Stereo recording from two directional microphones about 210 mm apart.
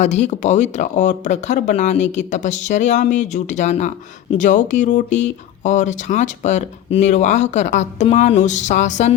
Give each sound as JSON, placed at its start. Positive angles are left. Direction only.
{"t": 0.0, "sound": "speech", "side_deg": 30}